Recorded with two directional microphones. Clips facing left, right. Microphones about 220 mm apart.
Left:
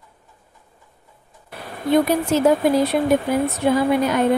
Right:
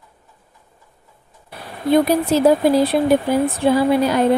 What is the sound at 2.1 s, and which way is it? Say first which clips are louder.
Speech: right 2 dB; 35° right (ahead or behind).